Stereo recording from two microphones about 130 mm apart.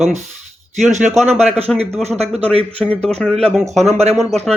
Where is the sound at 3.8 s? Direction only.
55° right (ahead or behind).